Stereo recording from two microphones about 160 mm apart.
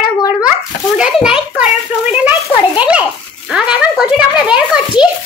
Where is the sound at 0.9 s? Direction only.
5° right (ahead or behind).